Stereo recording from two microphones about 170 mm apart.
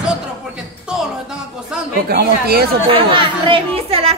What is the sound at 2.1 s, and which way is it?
Speech, 65° right (ahead or behind).